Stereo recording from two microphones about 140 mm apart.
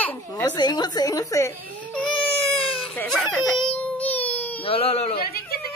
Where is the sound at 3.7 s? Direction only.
10° left (ahead or behind).